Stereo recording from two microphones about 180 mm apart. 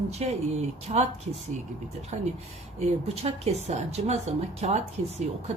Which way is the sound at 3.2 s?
35° right (ahead or behind).